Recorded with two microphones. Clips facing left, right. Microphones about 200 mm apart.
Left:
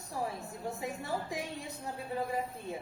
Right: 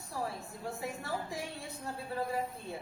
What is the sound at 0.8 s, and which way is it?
A woman's voice, 20° left (ahead or behind).